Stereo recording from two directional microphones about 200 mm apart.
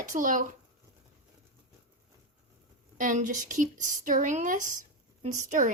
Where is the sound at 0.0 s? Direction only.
40° right (ahead or behind).